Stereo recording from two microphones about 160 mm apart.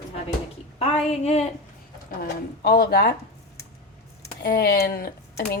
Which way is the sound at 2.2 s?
70° left (ahead or behind).